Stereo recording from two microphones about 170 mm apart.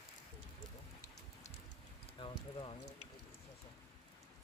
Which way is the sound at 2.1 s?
30° left (ahead or behind).